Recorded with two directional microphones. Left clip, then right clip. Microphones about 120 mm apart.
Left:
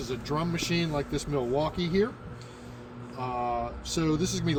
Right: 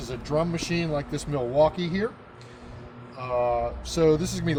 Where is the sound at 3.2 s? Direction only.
55° right (ahead or behind).